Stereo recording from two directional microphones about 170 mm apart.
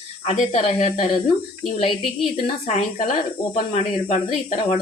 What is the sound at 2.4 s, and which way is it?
Speech, 40° left (ahead or behind).